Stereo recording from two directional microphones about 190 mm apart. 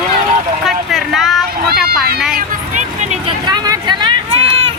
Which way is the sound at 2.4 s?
40° right (ahead or behind).